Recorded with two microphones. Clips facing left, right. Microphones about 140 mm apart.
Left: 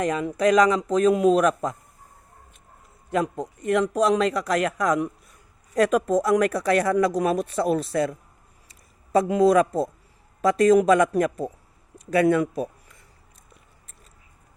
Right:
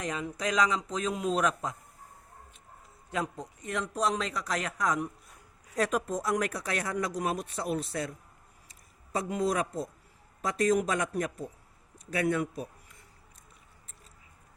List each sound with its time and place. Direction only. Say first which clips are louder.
0.0 s a man's voice: left 11 dB; 60° left (ahead or behind)
3.1 s a man's voice: left 9 dB; 55° left (ahead or behind)
5.7 s speech: left 10 dB; 75° left (ahead or behind)
9.1 s speech: left 12 dB; 85° left